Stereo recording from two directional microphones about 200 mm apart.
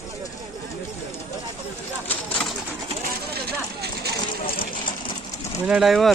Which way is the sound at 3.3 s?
50° right (ahead or behind).